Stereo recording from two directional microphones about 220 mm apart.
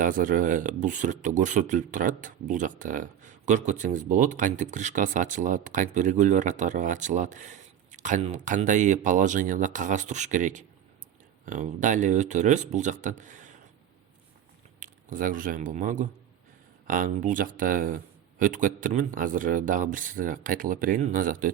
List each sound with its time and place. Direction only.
0.0 s speech: 35° right (ahead or behind)
14.8 s speech: 40° right (ahead or behind)